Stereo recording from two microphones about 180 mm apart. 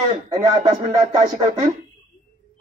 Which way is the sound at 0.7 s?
40° right (ahead or behind).